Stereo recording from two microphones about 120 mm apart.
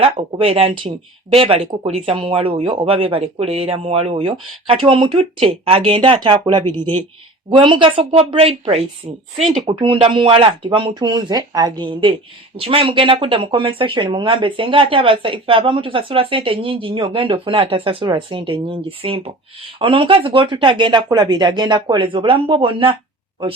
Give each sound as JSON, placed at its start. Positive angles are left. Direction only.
{"t": 0.0, "sound": "speech", "side_deg": -50}
{"t": 9.6, "sound": "speech", "side_deg": -45}